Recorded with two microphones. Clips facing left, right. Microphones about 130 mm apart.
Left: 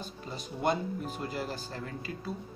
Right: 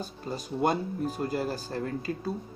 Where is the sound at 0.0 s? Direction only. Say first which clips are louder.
Right 5 dB; 40° right (ahead or behind).